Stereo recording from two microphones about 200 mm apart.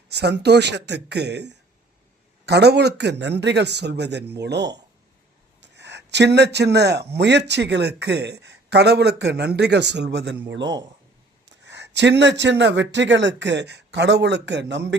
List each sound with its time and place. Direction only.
0.1 s speech: 55° right (ahead or behind)